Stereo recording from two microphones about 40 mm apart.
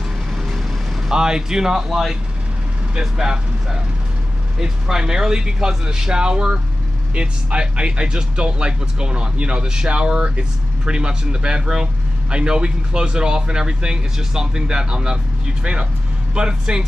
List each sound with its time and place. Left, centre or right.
1.0 s speech: centre
4.6 s speech: centre